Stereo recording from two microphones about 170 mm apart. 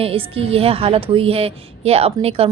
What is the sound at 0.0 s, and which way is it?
Speech, 35° right (ahead or behind).